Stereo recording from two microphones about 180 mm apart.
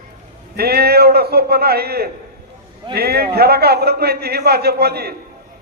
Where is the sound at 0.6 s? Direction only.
60° right (ahead or behind).